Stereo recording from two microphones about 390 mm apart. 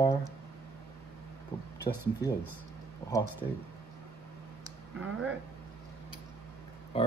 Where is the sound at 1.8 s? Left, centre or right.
Centre.